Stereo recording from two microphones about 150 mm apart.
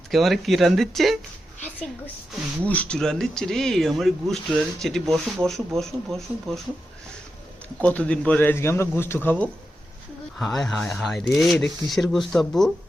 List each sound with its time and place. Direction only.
0.1 s speech: centre (ahead or behind)
2.6 s speech: 10° left (ahead or behind)
7.8 s a man's voice: 10° left (ahead or behind)